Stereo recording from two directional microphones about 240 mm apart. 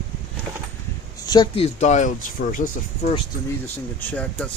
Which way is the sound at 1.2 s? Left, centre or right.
Centre.